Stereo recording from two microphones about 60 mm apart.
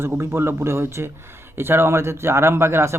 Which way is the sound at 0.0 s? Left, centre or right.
Right.